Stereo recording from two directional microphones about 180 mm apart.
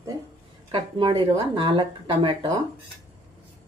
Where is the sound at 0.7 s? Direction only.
30° right (ahead or behind).